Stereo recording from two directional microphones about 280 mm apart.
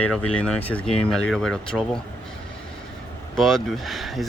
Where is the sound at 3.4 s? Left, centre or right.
Centre.